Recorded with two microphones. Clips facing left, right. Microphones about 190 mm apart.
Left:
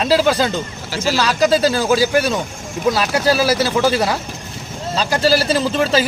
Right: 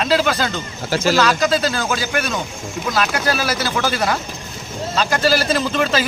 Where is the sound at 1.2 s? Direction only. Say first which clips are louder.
Left 6 dB; 35° left (ahead or behind).